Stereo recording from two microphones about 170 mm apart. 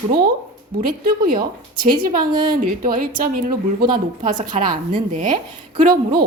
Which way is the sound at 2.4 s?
50° right (ahead or behind).